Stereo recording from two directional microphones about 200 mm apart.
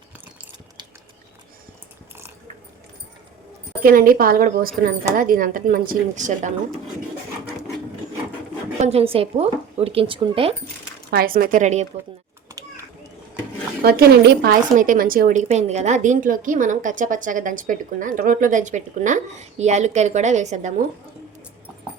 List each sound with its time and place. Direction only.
3.8 s speech: 45° right (ahead or behind)
8.8 s a woman's voice: 30° right (ahead or behind)
11.1 s speech: 50° right (ahead or behind)
13.8 s a woman's voice: 50° right (ahead or behind)